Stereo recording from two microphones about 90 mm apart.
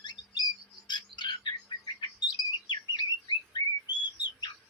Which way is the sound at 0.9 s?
55° left (ahead or behind).